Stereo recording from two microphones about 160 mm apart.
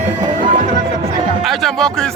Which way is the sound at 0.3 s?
55° right (ahead or behind).